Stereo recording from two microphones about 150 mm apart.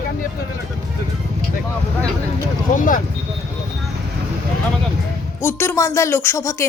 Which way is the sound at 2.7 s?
60° left (ahead or behind).